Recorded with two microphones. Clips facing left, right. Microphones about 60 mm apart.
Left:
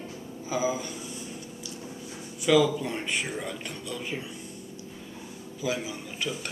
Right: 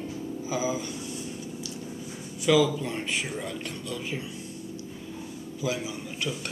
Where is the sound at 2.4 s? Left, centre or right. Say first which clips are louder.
Even; centre.